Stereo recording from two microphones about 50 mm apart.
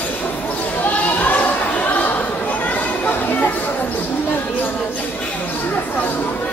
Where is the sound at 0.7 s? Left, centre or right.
Left.